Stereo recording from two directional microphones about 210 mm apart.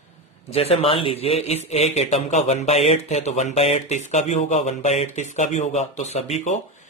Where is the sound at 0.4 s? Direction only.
30° left (ahead or behind).